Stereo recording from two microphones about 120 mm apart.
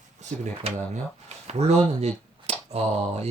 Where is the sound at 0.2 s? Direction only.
75° right (ahead or behind).